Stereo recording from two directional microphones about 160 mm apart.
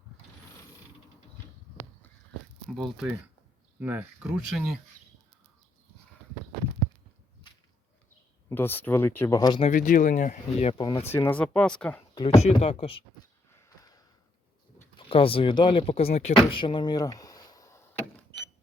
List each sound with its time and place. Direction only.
2.6 s speech: centre (ahead or behind)
3.8 s speech: 10° right (ahead or behind)
8.4 s speech: 15° left (ahead or behind)
9.6 s speech: 50° left (ahead or behind)
10.7 s speech: 30° left (ahead or behind)
11.1 s speech: 10° left (ahead or behind)
12.1 s speech: 25° left (ahead or behind)
12.4 s speech: 40° left (ahead or behind)
13.5 s a sound: 20° left (ahead or behind)
14.9 s speech: 35° left (ahead or behind)
16.5 s a sound: 30° left (ahead or behind)